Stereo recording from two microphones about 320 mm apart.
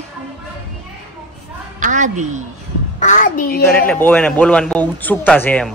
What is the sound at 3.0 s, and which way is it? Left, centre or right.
Speech, left.